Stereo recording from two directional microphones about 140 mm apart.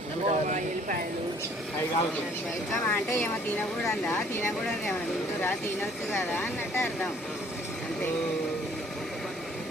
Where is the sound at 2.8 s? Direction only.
15° left (ahead or behind).